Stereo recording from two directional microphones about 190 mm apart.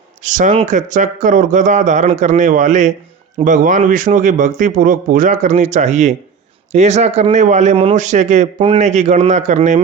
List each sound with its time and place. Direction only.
0.3 s a man's voice: 40° right (ahead or behind)